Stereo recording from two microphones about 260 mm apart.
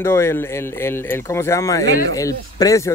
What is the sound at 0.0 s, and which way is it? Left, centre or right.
Speech, centre.